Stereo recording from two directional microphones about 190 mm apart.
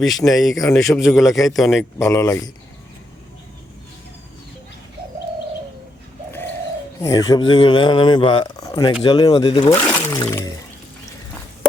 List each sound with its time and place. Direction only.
0.3 s a man's voice: centre (ahead or behind)
0.5 s speech: 20° left (ahead or behind)
0.9 s a man's voice: centre (ahead or behind)
2.0 s speech: 15° left (ahead or behind)
7.0 s speech: 20° left (ahead or behind)
9.7 s a sound: 15° left (ahead or behind)